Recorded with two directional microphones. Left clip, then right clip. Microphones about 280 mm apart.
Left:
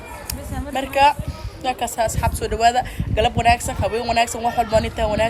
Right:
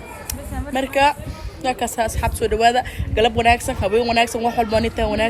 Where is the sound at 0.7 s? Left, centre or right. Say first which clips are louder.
Left 1 dB; centre.